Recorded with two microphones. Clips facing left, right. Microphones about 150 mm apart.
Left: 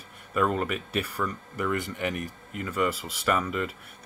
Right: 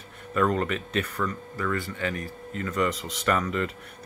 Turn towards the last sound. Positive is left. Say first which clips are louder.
# right 1 dB
turn(degrees=5)  # may be behind; listen again after turning